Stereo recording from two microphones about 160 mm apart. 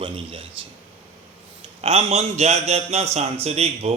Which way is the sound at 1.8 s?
40° right (ahead or behind).